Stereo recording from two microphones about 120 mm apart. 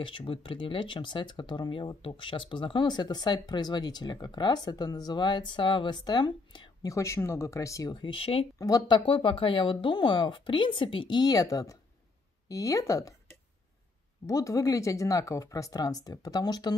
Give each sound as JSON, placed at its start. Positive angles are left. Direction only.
{"t": 0.0, "sound": "speech", "side_deg": 45}
{"t": 6.9, "sound": "speech", "side_deg": 25}
{"t": 8.5, "sound": "speech", "side_deg": 30}
{"t": 8.9, "sound": "speech", "side_deg": 45}
{"t": 14.2, "sound": "speech", "side_deg": 25}